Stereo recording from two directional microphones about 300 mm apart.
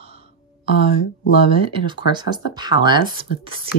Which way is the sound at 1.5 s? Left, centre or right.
Centre.